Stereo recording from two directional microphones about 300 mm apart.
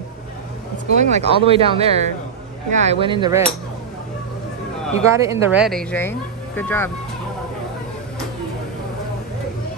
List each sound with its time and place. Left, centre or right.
0.9 s speech: right
5.1 s speech: centre